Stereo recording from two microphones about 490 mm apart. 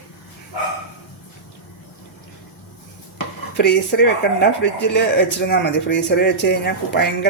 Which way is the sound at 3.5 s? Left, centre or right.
Centre.